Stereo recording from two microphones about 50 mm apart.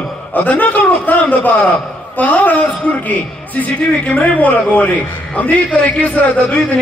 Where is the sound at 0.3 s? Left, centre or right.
Left.